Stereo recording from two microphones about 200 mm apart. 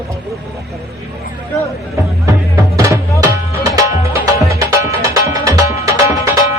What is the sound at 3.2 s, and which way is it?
Music, 15° right (ahead or behind).